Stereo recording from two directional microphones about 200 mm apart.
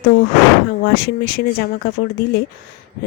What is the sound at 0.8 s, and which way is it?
Speech, 50° left (ahead or behind).